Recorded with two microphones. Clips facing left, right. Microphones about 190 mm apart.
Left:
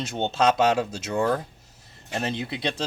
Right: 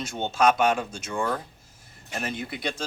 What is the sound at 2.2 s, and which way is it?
Speech, 25° left (ahead or behind).